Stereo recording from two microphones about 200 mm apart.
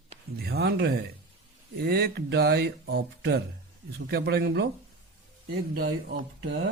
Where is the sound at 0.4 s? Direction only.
55° right (ahead or behind).